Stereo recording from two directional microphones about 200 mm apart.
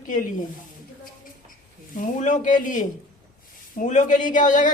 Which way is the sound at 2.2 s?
40° left (ahead or behind).